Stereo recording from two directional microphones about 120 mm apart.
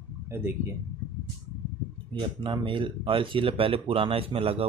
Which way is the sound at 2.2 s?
45° right (ahead or behind).